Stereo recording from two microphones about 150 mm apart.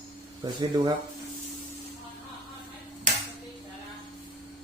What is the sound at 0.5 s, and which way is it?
Speech, 25° right (ahead or behind).